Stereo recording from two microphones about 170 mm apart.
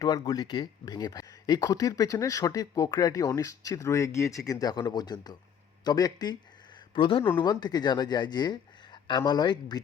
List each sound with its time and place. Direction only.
0.0 s speech: 20° left (ahead or behind)